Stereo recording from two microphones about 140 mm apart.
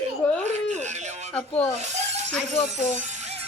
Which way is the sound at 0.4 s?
55° right (ahead or behind).